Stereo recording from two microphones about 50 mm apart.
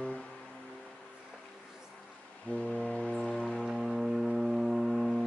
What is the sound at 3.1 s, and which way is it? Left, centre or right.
Music, centre.